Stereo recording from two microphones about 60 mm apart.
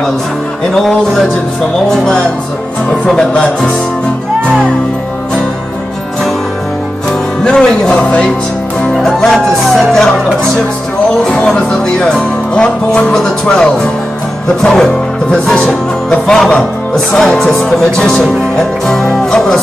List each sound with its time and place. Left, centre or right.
0.7 s speech: centre
7.4 s speech: centre
8.9 s speech: centre
16.1 s speech: centre
16.9 s speech: centre